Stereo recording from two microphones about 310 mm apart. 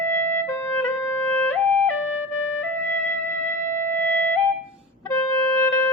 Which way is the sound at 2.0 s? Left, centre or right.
Left.